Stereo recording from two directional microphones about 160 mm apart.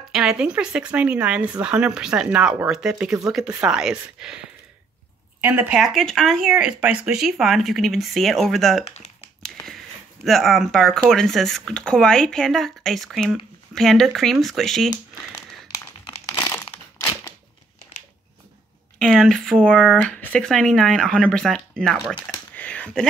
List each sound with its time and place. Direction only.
0.1 s speech: 5° right (ahead or behind)
5.8 s speech: centre (ahead or behind)
9.4 s a sound: centre (ahead or behind)
10.2 s speech: centre (ahead or behind)
16.3 s crumpling: 25° left (ahead or behind)
18.9 s speech: 5° left (ahead or behind)
22.6 s a sound: 10° left (ahead or behind)